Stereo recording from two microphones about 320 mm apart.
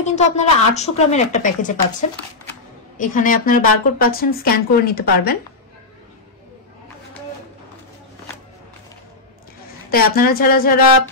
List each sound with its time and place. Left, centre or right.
0.0 s a woman's voice: left
9.8 s a woman's voice: left